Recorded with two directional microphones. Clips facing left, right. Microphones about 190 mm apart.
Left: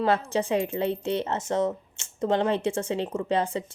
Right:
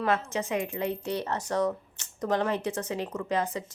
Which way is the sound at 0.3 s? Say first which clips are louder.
Left 5 dB; 30° left (ahead or behind).